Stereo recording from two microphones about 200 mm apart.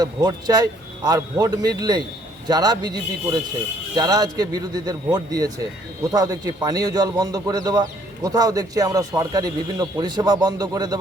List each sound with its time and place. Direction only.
0.0 s a man's voice: 20° right (ahead or behind)